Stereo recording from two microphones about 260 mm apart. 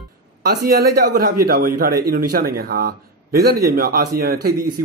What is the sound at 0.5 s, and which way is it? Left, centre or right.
Speech, right.